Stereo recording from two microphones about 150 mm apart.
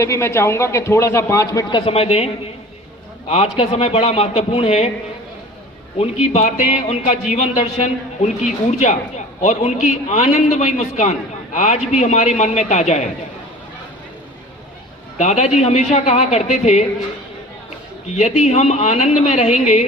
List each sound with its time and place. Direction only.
0.0 s a man's voice: 20° left (ahead or behind)
1.8 s a man's voice: 40° left (ahead or behind)
6.3 s a man's voice: 50° left (ahead or behind)
15.2 s a man's voice: 50° left (ahead or behind)
18.2 s a man's voice: 50° left (ahead or behind)